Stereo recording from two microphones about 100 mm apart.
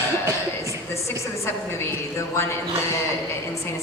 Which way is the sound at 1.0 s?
25° left (ahead or behind).